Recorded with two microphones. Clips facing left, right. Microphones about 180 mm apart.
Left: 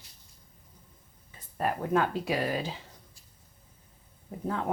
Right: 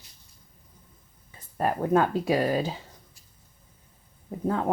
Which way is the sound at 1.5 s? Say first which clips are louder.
Right 4 dB; 40° right (ahead or behind).